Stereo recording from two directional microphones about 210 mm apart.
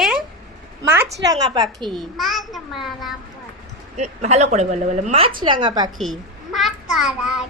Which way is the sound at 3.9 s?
35° right (ahead or behind).